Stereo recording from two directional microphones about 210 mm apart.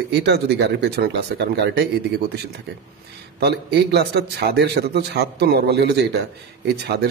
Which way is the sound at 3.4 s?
50° right (ahead or behind).